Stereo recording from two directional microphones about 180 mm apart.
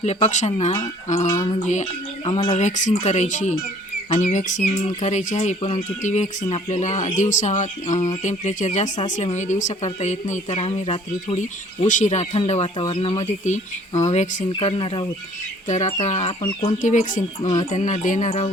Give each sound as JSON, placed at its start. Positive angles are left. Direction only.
{"t": 0.0, "sound": "speech", "side_deg": 40}
{"t": 14.5, "sound": "speech", "side_deg": 30}
{"t": 15.6, "sound": "speech", "side_deg": 40}